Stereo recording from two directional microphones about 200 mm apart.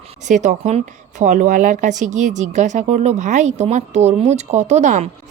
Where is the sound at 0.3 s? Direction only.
35° right (ahead or behind).